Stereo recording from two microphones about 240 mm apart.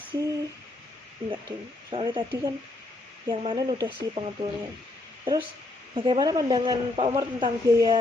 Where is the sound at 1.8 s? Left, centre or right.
Centre.